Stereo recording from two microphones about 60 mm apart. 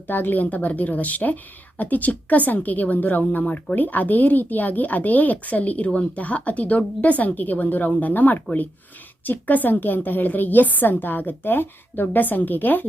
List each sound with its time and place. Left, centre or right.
0.1 s a woman's voice: left